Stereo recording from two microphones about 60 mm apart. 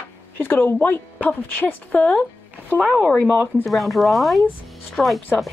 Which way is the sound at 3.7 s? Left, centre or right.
Centre.